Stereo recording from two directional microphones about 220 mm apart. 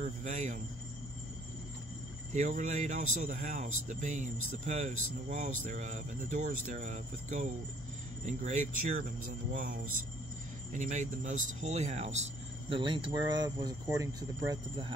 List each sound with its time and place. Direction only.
0.0 s speech: 30° right (ahead or behind)
2.3 s speech: 35° right (ahead or behind)
10.7 s speech: 35° right (ahead or behind)